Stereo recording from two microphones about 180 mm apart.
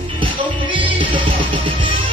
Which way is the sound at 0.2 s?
30° right (ahead or behind).